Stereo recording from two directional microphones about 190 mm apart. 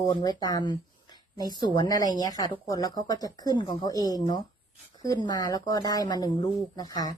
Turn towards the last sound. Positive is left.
turn(degrees=20)  # may be behind; listen again after turning